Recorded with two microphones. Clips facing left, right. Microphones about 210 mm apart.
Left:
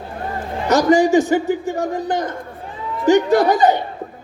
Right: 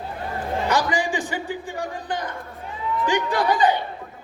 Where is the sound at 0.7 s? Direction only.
45° left (ahead or behind).